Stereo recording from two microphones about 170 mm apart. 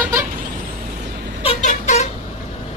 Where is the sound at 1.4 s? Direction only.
45° left (ahead or behind).